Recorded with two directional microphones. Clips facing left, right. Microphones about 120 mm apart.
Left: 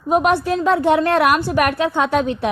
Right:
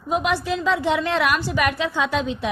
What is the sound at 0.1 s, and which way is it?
A woman's voice, 50° left (ahead or behind).